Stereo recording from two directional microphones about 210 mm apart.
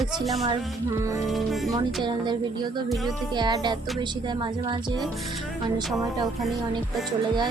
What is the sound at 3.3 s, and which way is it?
Speech, 20° right (ahead or behind).